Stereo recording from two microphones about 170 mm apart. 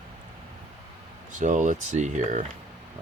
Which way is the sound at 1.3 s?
50° right (ahead or behind).